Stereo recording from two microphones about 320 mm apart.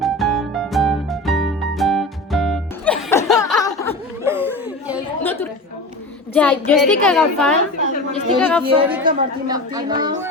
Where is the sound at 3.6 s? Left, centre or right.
Centre.